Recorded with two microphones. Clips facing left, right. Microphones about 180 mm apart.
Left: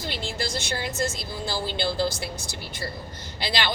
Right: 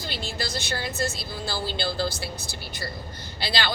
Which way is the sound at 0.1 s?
25° left (ahead or behind).